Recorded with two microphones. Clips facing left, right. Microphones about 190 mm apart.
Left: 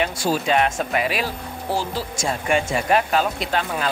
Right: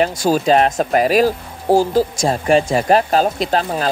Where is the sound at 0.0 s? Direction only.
40° right (ahead or behind).